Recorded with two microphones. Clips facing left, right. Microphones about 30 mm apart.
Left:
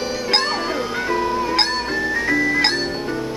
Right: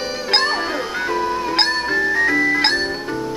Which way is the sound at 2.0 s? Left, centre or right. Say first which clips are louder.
Right 5 dB; centre.